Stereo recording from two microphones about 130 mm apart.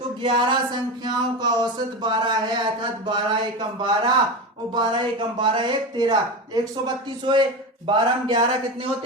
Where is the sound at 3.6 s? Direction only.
35° right (ahead or behind).